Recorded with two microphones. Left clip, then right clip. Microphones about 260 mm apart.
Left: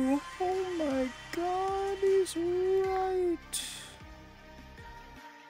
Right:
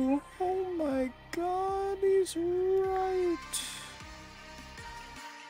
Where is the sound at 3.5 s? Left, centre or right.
Centre.